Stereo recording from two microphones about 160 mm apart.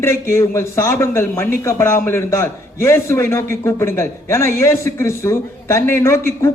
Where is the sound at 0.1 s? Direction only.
15° left (ahead or behind).